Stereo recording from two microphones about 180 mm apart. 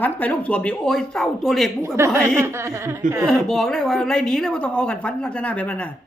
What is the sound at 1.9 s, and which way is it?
A woman's voice, 15° right (ahead or behind).